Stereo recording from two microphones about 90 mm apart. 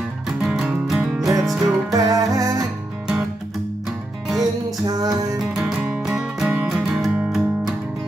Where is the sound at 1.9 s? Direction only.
40° right (ahead or behind).